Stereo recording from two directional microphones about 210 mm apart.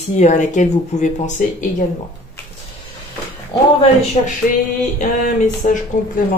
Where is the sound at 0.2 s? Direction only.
35° left (ahead or behind).